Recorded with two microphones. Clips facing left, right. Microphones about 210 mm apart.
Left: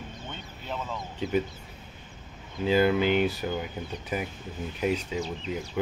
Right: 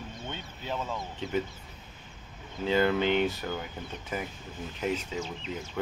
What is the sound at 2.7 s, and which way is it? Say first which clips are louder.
Speech: left 3 dB; 10° left (ahead or behind).